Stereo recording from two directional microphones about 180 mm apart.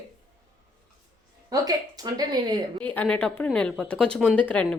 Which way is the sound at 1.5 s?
20° right (ahead or behind).